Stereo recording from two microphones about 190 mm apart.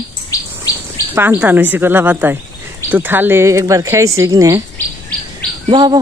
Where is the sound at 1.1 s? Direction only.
10° right (ahead or behind).